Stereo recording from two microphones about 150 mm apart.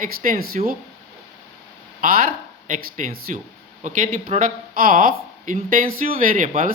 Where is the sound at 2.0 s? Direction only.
75° right (ahead or behind).